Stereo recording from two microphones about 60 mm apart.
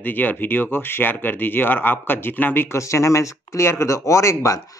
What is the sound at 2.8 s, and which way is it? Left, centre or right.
Speech, left.